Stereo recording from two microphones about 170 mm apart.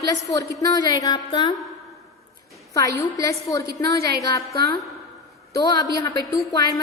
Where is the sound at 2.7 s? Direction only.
20° left (ahead or behind).